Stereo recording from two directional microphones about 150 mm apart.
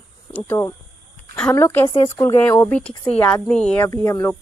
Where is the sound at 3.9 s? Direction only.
20° left (ahead or behind).